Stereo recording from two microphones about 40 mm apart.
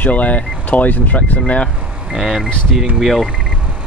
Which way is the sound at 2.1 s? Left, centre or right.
Centre.